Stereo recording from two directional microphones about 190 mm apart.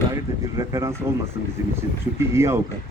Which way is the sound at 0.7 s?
15° right (ahead or behind).